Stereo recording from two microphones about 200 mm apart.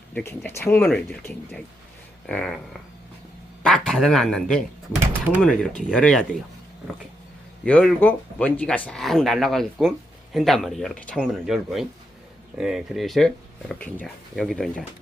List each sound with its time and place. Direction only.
0.1 s speech: 10° left (ahead or behind)
3.6 s speech: centre (ahead or behind)
7.6 s speech: 5° left (ahead or behind)